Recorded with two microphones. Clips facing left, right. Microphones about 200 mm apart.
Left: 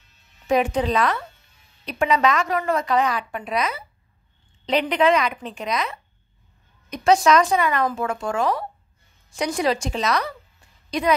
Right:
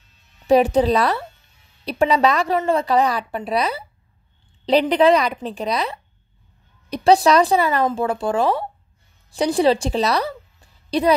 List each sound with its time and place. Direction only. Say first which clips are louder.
0.5 s a woman's voice: right 6 dB; 35° right (ahead or behind)